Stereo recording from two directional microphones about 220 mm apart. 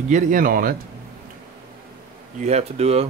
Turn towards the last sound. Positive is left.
turn(degrees=-30)  # may be behind; listen again after turning